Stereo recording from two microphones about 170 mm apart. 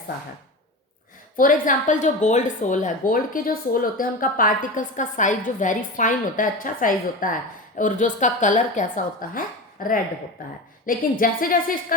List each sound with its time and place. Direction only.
1.4 s a woman's voice: 50° left (ahead or behind)